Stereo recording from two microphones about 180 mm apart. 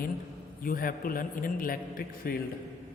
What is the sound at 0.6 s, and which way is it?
A man's voice, 50° left (ahead or behind).